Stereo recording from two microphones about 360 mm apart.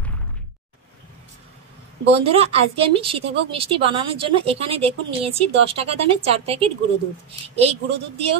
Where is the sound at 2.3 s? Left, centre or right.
Centre.